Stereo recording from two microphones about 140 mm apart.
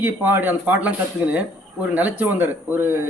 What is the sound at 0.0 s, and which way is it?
Speech, 15° right (ahead or behind).